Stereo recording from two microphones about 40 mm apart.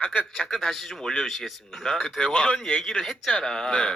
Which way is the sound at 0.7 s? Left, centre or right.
Centre.